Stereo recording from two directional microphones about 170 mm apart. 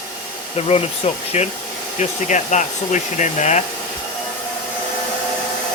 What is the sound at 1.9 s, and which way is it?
Hair dryer, 45° left (ahead or behind).